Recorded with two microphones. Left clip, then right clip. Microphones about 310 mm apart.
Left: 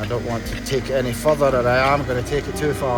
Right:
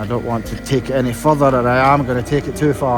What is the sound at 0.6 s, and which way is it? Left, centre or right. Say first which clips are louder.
A man's voice: right 3 dB; right.